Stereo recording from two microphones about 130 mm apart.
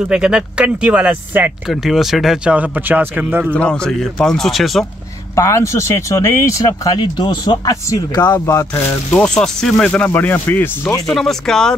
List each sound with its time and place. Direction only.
0.1 s speech: 5° right (ahead or behind)
3.5 s speech: 10° left (ahead or behind)
5.3 s speech: 20° left (ahead or behind)
11.1 s speech: 5° left (ahead or behind)